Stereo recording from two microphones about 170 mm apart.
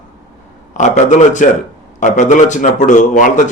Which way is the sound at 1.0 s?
45° left (ahead or behind).